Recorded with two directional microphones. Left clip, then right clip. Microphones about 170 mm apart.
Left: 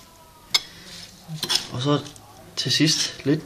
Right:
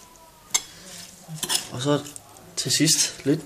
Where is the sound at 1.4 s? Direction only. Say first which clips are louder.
Left 3 dB; 5° right (ahead or behind).